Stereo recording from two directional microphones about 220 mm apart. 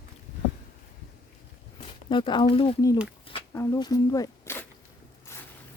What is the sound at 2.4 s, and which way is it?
Speech, 25° left (ahead or behind).